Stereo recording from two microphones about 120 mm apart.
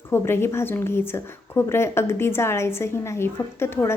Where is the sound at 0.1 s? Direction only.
20° left (ahead or behind).